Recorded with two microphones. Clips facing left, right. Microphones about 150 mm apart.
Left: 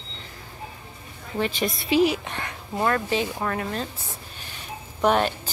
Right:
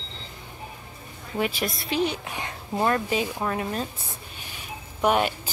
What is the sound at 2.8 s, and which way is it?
Speech, 20° right (ahead or behind).